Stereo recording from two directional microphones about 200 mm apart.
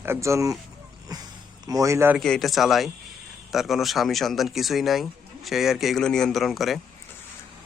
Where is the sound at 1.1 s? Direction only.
20° right (ahead or behind).